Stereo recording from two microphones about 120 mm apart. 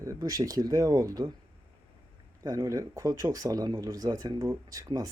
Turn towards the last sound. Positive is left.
turn(degrees=-30)  # may be behind; listen again after turning